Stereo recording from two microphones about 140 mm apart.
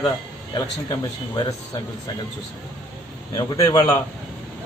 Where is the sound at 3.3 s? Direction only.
25° left (ahead or behind).